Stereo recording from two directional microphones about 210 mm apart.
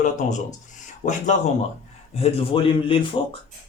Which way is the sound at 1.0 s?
35° left (ahead or behind).